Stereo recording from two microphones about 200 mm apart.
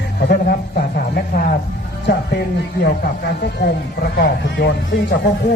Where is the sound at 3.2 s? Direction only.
50° left (ahead or behind).